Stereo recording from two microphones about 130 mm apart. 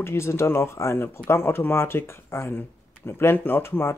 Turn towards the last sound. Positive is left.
turn(degrees=15)  # may be behind; listen again after turning